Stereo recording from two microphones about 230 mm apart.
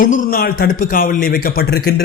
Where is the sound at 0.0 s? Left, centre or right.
Left.